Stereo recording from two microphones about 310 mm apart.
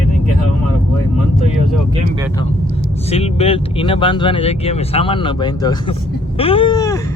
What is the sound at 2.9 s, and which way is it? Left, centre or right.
Speech, centre.